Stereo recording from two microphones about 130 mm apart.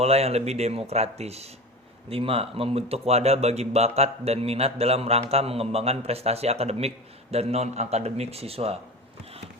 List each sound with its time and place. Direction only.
0.0 s a man's voice: 50° right (ahead or behind)